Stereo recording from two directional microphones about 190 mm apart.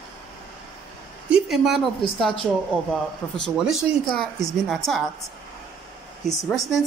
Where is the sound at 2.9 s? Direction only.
5° left (ahead or behind).